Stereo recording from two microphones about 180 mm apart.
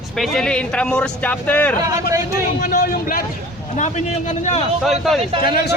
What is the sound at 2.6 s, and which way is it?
Speech, 50° left (ahead or behind).